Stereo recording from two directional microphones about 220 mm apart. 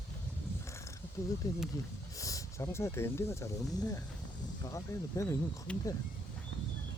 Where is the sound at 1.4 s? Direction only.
15° left (ahead or behind).